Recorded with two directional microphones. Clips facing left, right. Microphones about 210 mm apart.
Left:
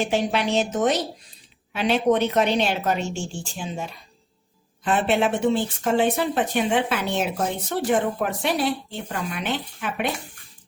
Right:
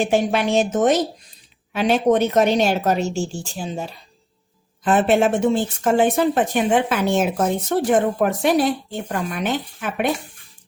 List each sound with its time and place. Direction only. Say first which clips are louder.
0.0 s speech: right 4 dB; 50° right (ahead or behind)